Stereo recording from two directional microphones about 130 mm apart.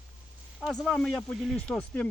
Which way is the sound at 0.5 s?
Centre (ahead or behind).